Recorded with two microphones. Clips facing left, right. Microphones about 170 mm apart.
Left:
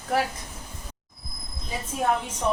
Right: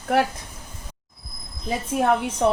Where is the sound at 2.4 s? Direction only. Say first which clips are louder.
Right 5 dB; 65° right (ahead or behind).